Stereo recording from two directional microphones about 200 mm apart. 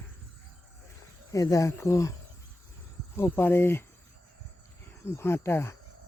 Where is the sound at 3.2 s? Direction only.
10° left (ahead or behind).